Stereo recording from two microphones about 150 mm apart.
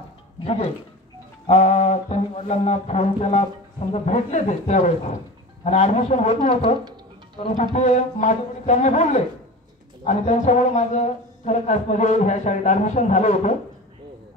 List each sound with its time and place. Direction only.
0.4 s speech: 40° left (ahead or behind)
7.7 s speech: 50° left (ahead or behind)